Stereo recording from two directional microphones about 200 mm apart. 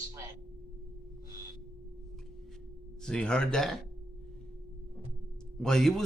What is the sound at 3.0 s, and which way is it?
Speech, 5° left (ahead or behind).